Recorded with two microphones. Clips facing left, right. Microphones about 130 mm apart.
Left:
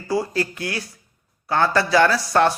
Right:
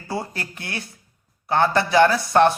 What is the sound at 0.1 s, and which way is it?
Speech, 25° right (ahead or behind).